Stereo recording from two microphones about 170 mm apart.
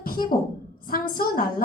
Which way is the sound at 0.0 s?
60° left (ahead or behind).